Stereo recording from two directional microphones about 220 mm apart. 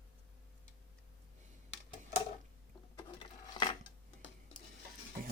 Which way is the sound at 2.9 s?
20° left (ahead or behind).